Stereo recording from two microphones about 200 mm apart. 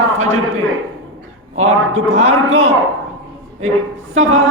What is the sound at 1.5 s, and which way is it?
Speech, 90° right.